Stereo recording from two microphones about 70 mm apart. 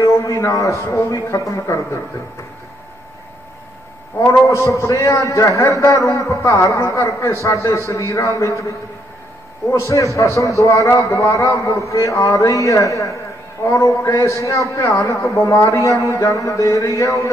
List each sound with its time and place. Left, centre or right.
0.0 s a man's voice: left
4.5 s a man's voice: left
9.7 s a man's voice: left